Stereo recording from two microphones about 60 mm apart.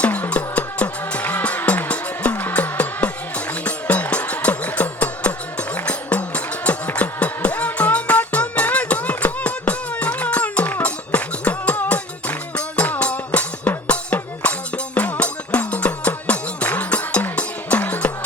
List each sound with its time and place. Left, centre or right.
0.0 s music: left